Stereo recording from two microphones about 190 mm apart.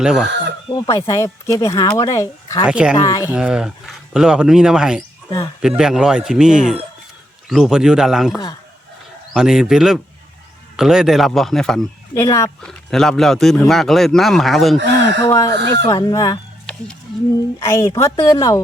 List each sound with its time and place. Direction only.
0.0 s speech: 5° right (ahead or behind)
0.7 s speech: 20° left (ahead or behind)
2.6 s speech: 5° right (ahead or behind)
3.0 s speech: 15° left (ahead or behind)
3.3 s speech: 5° right (ahead or behind)
12.1 s speech: 15° left (ahead or behind)
12.6 s speech: 5° left (ahead or behind)
15.2 s speech: 15° left (ahead or behind)
17.6 s speech: 15° left (ahead or behind)